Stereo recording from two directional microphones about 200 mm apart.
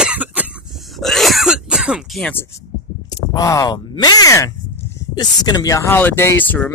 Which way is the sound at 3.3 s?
20° left (ahead or behind).